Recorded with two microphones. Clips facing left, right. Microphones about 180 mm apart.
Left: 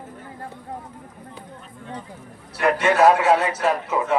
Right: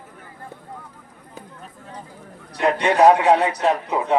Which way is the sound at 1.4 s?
45° right (ahead or behind).